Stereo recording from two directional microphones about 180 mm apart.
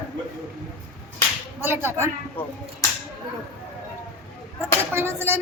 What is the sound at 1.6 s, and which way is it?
Speech, 10° right (ahead or behind).